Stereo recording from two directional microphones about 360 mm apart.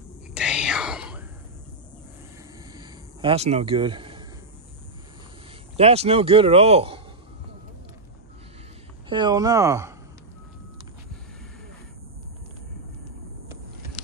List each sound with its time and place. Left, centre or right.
0.3 s whispering: centre
2.7 s a sound: centre
5.8 s a man's voice: centre
9.1 s a man's voice: centre